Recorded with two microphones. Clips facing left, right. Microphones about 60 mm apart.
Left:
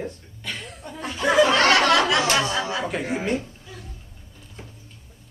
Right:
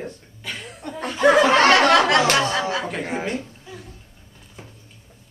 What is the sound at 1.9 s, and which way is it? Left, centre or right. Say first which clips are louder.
Chatter: right 3 dB; right.